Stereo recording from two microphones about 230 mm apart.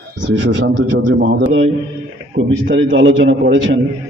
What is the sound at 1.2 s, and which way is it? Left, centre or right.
Speech, right.